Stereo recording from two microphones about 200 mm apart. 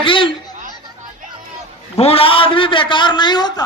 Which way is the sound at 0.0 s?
25° left (ahead or behind).